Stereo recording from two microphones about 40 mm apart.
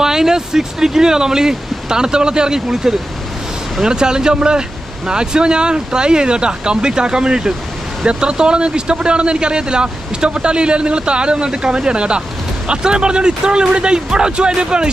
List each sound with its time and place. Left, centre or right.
0.0 s speech: centre